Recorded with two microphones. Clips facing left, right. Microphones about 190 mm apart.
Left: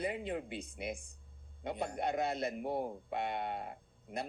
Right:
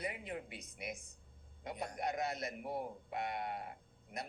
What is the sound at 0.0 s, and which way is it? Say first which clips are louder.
A man's voice: left 6 dB; 30° left (ahead or behind).